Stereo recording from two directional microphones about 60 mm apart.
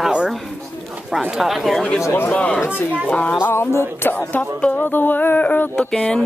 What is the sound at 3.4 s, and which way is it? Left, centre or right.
Music, left.